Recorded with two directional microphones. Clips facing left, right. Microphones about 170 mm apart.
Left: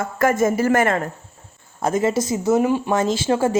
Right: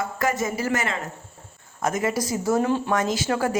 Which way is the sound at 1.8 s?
30° left (ahead or behind).